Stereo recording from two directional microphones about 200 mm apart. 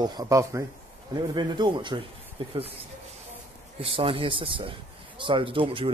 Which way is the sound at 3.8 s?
25° right (ahead or behind).